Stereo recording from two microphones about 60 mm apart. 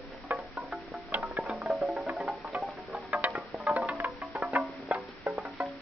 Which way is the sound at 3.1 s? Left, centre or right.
Right.